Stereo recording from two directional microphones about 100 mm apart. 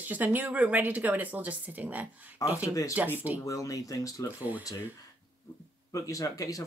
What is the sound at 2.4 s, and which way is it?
Speech, 35° left (ahead or behind).